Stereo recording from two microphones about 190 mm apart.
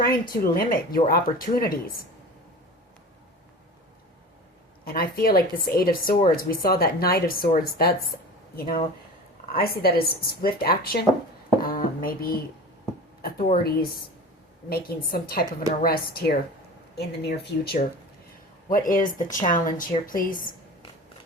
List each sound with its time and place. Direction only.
0.0 s speech: 50° left (ahead or behind)
4.9 s speech: 50° left (ahead or behind)
11.6 s a sound: 50° left (ahead or behind)
13.2 s speech: 45° left (ahead or behind)
18.7 s speech: 45° left (ahead or behind)